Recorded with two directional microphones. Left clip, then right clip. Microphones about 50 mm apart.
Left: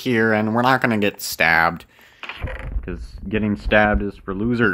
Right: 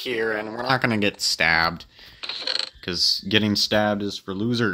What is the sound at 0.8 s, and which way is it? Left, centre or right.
Speech, left.